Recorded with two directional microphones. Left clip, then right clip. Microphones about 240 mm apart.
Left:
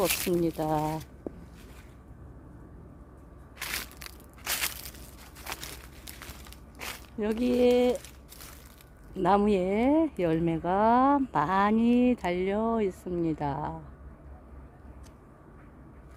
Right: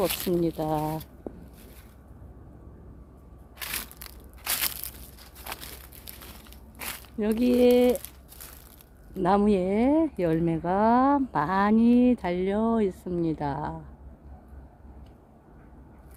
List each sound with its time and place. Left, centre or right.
0.0 s speech: centre
1.3 s a sound: centre
3.6 s a sound: centre
6.7 s walk: centre
7.2 s speech: centre
9.1 s speech: centre